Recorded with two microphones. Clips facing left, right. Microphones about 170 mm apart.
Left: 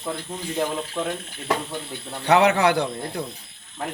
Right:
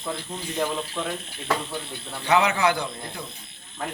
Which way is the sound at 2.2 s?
65° left (ahead or behind).